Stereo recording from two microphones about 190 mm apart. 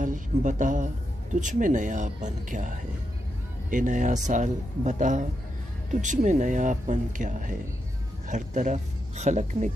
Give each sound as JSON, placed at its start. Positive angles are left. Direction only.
{"t": 0.0, "sound": "speech", "side_deg": -40}
{"t": 3.7, "sound": "speech", "side_deg": -40}